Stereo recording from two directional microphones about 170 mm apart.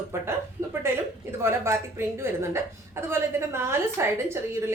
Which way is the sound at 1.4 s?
15° right (ahead or behind).